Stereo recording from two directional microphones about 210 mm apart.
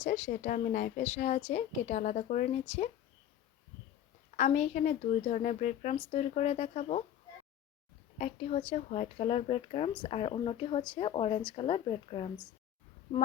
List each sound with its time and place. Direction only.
0.0 s a woman's voice: 35° left (ahead or behind)
4.4 s a woman's voice: 35° left (ahead or behind)
8.2 s speech: 30° left (ahead or behind)